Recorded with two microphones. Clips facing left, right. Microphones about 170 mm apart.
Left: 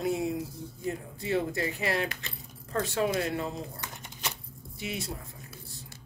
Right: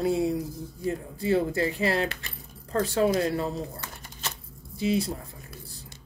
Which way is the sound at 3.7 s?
15° left (ahead or behind).